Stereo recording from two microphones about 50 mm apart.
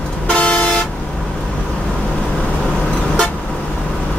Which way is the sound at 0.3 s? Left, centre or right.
Centre.